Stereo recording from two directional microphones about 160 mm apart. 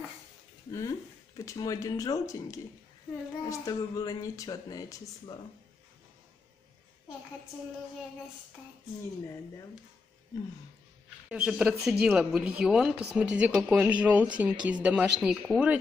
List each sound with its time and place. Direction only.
0.7 s speech: 20° left (ahead or behind)
11.2 s speech: 5° right (ahead or behind)